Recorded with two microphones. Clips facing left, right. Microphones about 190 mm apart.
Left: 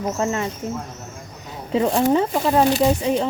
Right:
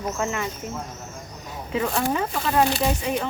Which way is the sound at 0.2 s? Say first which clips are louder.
Left 4 dB; 30° left (ahead or behind).